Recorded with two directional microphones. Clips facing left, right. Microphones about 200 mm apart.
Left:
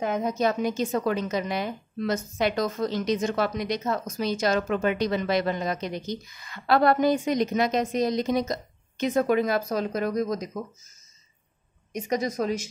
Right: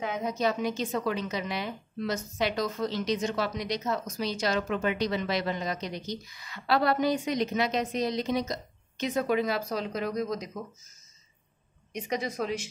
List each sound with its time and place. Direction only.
0.0 s a woman's voice: 45° left (ahead or behind)
11.9 s a woman's voice: 45° left (ahead or behind)